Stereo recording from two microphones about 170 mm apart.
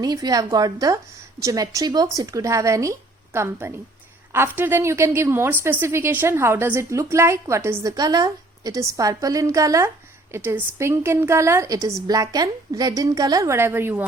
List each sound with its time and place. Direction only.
0.0 s a woman's voice: 20° right (ahead or behind)